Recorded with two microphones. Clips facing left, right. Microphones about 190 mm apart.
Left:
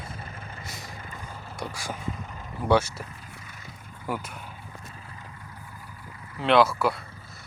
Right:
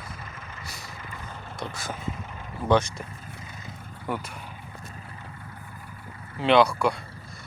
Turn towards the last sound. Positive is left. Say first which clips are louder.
# right 1 dB
turn(degrees=0)  # may be behind; listen again after turning